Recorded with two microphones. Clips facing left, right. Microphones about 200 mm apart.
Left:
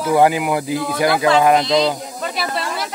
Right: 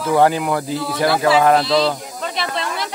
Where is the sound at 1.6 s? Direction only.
Centre (ahead or behind).